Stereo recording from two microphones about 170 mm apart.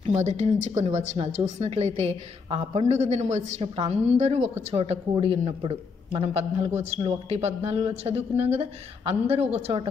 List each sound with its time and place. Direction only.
0.0 s a woman's voice: 40° right (ahead or behind)